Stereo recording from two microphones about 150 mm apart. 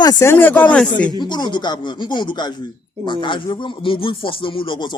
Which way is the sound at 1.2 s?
30° left (ahead or behind).